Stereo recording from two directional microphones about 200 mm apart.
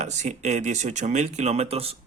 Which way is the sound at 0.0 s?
35° right (ahead or behind).